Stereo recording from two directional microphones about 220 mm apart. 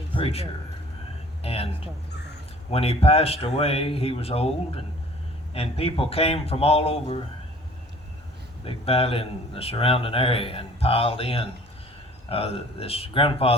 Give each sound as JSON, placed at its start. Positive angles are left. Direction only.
{"t": 0.1, "sound": "speech", "side_deg": 25}
{"t": 8.6, "sound": "speech", "side_deg": 25}